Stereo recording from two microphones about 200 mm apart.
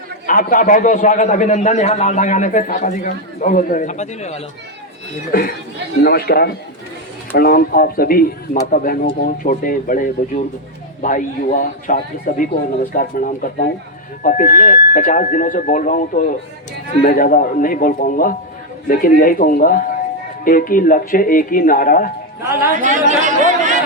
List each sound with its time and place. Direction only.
0.3 s a man's voice: 40° left (ahead or behind)
5.3 s a man's voice: 45° left (ahead or behind)
22.8 s speech: 40° right (ahead or behind)